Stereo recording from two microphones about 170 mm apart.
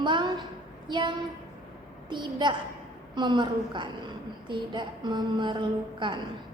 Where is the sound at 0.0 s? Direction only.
25° right (ahead or behind).